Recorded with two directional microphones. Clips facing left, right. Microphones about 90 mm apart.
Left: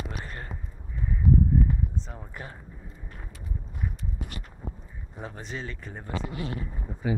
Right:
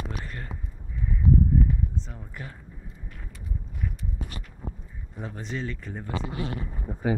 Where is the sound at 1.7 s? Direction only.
30° left (ahead or behind).